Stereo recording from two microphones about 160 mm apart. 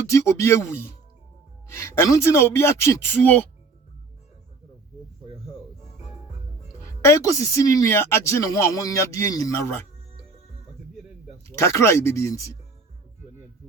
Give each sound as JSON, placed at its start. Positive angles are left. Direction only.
{"t": 0.1, "sound": "speech", "side_deg": 20}
{"t": 7.0, "sound": "speech", "side_deg": 20}
{"t": 11.4, "sound": "speech", "side_deg": 20}